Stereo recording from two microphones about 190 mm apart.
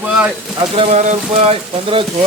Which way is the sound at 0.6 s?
35° right (ahead or behind).